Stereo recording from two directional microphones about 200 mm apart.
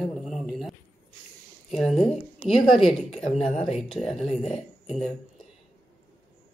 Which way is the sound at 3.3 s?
30° left (ahead or behind).